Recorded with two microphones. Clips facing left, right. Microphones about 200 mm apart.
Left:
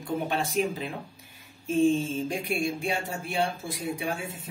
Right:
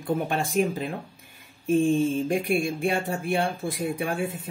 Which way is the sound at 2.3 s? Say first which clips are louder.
Right 4 dB; 55° right (ahead or behind).